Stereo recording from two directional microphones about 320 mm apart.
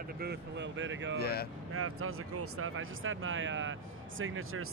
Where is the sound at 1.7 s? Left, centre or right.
Right.